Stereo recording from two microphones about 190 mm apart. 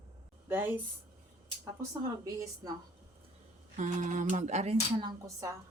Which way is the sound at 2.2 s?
15° right (ahead or behind).